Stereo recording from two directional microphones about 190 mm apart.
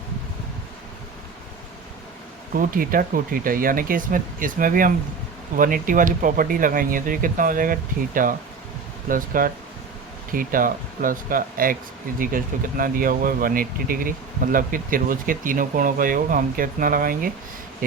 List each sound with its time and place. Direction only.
2.6 s speech: 50° right (ahead or behind)